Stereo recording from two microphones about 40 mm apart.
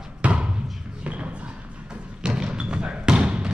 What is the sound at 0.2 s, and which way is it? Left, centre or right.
Music, right.